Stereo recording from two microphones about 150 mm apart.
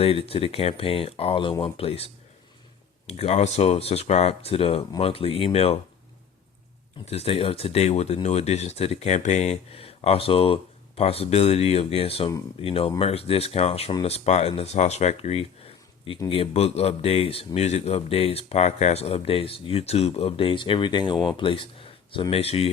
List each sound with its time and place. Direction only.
0.0 s speech: 40° left (ahead or behind)
3.1 s speech: 45° left (ahead or behind)
7.0 s speech: 45° left (ahead or behind)